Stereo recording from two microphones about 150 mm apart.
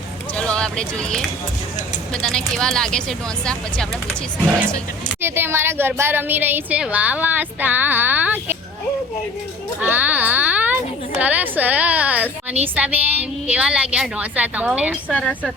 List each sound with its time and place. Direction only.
0.3 s speech: 5° left (ahead or behind)
5.2 s a woman's voice: 15° right (ahead or behind)
9.8 s a child's voice: 10° right (ahead or behind)
15.1 s speech: 10° left (ahead or behind)